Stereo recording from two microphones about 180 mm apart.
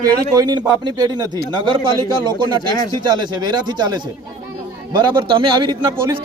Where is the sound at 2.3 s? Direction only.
25° right (ahead or behind).